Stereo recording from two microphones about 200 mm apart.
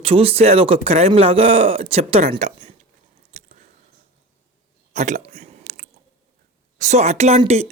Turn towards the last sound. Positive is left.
turn(degrees=-35)  # may be behind; listen again after turning